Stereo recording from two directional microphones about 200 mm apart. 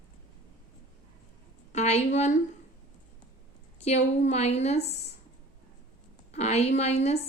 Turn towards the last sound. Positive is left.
turn(degrees=30)  # may be behind; listen again after turning